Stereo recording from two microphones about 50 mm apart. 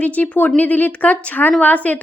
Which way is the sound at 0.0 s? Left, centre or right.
Left.